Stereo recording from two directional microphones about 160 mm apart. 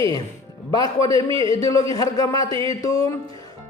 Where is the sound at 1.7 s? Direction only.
20° left (ahead or behind).